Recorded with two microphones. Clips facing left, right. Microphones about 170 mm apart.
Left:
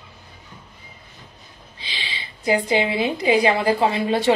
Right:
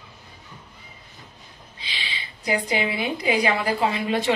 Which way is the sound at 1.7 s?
30° left (ahead or behind).